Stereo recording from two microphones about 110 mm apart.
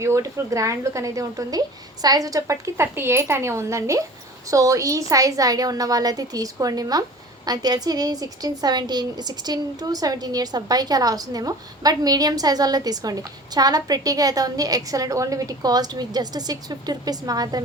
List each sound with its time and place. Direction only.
0.0 s a woman's voice: 25° right (ahead or behind)